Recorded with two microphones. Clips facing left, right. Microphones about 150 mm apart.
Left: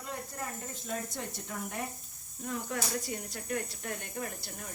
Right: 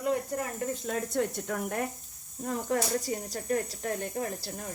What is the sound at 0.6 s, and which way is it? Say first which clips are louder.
Speech: right 7 dB; 60° right (ahead or behind).